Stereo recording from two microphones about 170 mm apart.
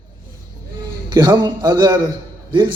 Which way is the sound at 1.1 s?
25° right (ahead or behind).